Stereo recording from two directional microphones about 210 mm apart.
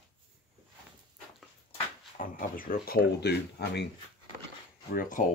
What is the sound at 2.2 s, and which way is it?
Speech, 40° left (ahead or behind).